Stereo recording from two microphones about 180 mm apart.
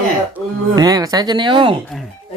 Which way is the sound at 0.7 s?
20° right (ahead or behind).